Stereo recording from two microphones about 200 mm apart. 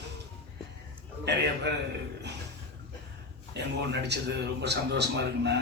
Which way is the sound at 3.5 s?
55° right (ahead or behind).